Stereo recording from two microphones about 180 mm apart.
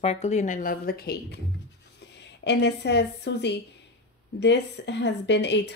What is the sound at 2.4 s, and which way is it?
A woman's voice, 70° left (ahead or behind).